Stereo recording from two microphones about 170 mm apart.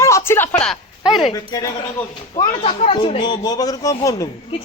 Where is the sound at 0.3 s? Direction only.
10° left (ahead or behind).